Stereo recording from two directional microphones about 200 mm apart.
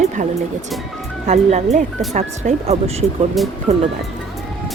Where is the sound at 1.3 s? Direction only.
35° right (ahead or behind).